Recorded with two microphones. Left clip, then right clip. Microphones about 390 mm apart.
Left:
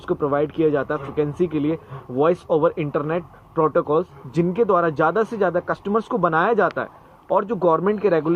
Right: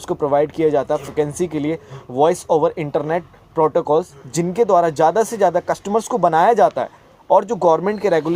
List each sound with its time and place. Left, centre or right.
0.0 s speech: centre